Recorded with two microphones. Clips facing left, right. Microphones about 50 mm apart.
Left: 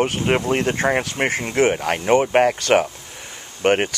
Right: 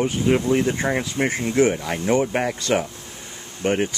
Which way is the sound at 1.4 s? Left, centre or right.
Left.